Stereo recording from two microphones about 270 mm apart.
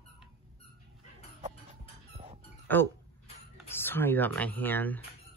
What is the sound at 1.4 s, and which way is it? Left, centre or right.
Chicken, right.